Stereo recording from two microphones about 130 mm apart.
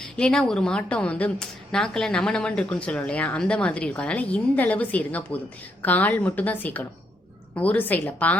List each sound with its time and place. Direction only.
0.0 s a woman's voice: 5° left (ahead or behind)